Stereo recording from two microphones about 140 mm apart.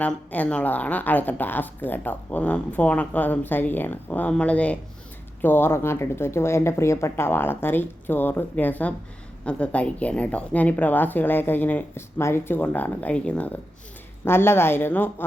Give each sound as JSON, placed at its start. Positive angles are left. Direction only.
{"t": 0.0, "sound": "speech", "side_deg": 10}